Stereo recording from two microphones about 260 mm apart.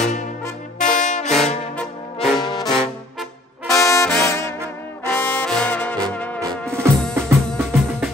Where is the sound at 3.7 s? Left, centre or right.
Centre.